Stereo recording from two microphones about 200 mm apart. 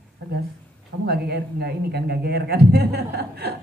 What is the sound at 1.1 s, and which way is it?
Speech, 55° right (ahead or behind).